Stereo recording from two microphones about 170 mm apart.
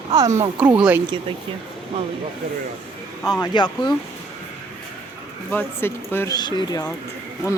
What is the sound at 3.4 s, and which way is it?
Speech, 25° left (ahead or behind).